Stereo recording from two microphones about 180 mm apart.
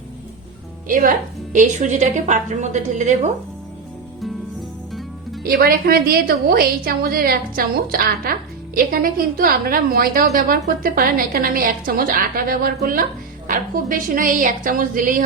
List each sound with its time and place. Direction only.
0.9 s a woman's voice: 50° right (ahead or behind)
4.9 s music: centre (ahead or behind)
5.4 s a woman's voice: 60° right (ahead or behind)